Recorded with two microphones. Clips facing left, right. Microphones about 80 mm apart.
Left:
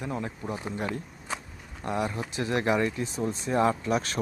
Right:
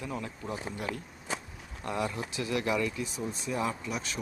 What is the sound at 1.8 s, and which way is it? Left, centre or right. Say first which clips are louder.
Speech: left 3 dB; left.